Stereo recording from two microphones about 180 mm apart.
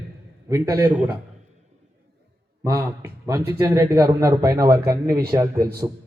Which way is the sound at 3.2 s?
15° right (ahead or behind).